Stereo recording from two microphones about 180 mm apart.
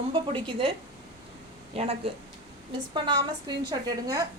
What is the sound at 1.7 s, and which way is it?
Speech, 35° right (ahead or behind).